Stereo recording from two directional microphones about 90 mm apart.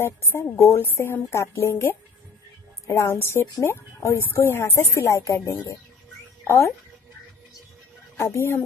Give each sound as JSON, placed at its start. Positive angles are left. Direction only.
{"t": 0.3, "sound": "a woman's voice", "side_deg": 30}
{"t": 3.0, "sound": "a woman's voice", "side_deg": 25}
{"t": 8.2, "sound": "a woman's voice", "side_deg": 30}